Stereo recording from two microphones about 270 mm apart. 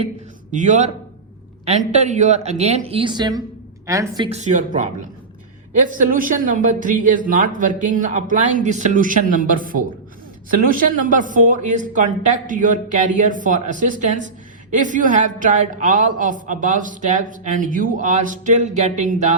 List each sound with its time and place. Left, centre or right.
0.5 s a woman's voice: right